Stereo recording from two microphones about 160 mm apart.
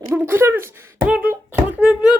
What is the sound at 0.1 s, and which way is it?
Beatboxing, 15° right (ahead or behind).